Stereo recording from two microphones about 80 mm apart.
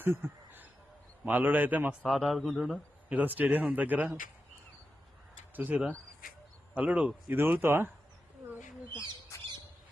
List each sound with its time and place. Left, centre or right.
0.2 s a sound: right
1.2 s speech: right
2.0 s speech: centre
3.1 s speech: centre
5.5 s speech: centre
7.3 s speech: right
8.9 s speech: right